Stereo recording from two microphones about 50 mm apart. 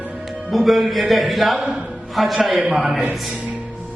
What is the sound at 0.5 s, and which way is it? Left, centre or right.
A man's voice, centre.